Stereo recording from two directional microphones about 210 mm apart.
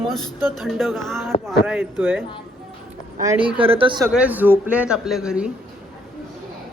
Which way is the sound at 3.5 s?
25° right (ahead or behind).